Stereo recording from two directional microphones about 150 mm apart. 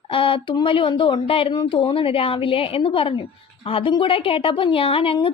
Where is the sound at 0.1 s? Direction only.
35° left (ahead or behind).